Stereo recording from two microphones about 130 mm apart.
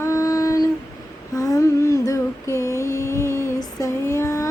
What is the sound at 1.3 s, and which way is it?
Humming, 25° left (ahead or behind).